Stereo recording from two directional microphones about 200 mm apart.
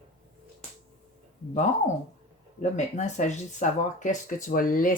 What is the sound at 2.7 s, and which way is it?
Speech, 35° left (ahead or behind).